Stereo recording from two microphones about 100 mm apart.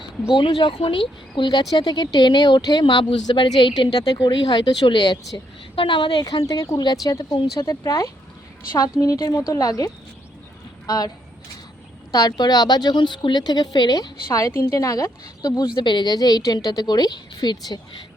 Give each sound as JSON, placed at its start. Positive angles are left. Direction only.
{"t": 0.3, "sound": "a woman's voice", "side_deg": 60}
{"t": 2.8, "sound": "a woman's voice", "side_deg": 60}
{"t": 5.7, "sound": "speech", "side_deg": 60}
{"t": 6.5, "sound": "a woman's voice", "side_deg": 35}
{"t": 12.1, "sound": "a woman's voice", "side_deg": 40}
{"t": 15.6, "sound": "a woman's voice", "side_deg": 50}